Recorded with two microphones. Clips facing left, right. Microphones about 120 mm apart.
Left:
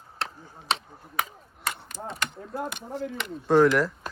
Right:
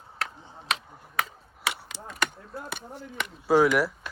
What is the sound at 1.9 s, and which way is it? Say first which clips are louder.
Mechanisms: left 6 dB; 80° right.